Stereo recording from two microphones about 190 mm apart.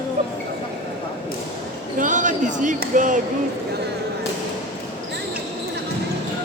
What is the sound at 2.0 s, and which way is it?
Speech, 40° right (ahead or behind).